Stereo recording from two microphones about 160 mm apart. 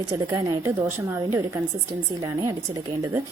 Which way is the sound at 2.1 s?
25° right (ahead or behind).